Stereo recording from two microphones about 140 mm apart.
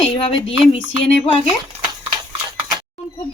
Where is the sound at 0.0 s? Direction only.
40° left (ahead or behind).